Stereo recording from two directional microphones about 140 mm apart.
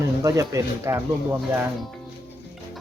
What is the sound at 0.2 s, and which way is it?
Speech, 25° right (ahead or behind).